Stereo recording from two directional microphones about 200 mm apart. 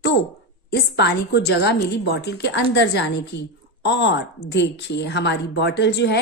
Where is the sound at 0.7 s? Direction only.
55° left (ahead or behind).